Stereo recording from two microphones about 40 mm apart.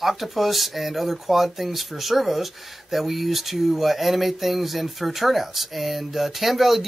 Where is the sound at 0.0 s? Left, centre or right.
Centre.